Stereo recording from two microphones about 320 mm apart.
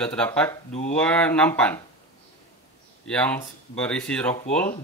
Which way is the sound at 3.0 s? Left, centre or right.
Centre.